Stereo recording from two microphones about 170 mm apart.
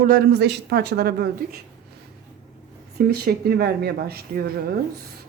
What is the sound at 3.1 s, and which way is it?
Speech, 65° right (ahead or behind).